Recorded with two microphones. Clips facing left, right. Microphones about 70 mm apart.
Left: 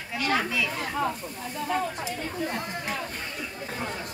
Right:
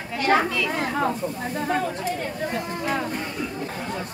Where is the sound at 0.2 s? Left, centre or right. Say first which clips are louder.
Right 7 dB; right.